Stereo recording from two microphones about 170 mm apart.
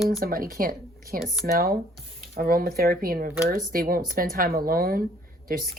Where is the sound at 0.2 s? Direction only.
60° right (ahead or behind).